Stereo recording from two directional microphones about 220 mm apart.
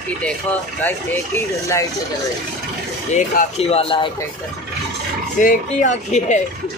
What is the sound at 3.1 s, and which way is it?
Speech, 30° left (ahead or behind).